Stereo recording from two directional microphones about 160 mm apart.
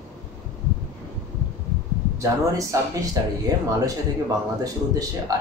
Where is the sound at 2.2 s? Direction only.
20° right (ahead or behind).